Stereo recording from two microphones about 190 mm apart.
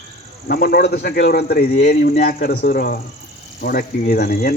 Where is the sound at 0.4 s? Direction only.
55° left (ahead or behind).